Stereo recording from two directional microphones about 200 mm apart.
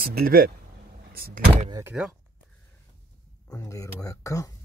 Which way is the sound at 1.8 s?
5° right (ahead or behind).